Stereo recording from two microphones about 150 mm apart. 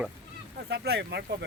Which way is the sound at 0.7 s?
90° right.